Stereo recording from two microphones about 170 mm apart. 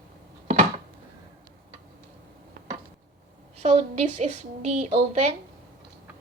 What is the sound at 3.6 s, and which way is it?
A woman's voice, 40° right (ahead or behind).